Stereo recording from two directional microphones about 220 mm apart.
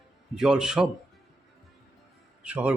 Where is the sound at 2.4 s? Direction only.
5° right (ahead or behind).